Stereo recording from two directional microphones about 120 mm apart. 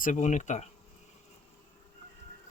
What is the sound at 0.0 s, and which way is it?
Speech, 90° left.